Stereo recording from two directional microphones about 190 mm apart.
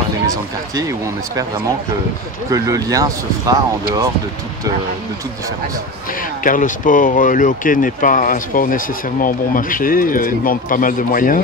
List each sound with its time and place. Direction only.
0.3 s speech: 15° right (ahead or behind)
2.5 s speech: 15° right (ahead or behind)
6.4 s speech: 45° left (ahead or behind)